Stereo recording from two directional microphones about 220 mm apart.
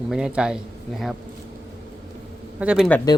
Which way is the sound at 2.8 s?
10° left (ahead or behind).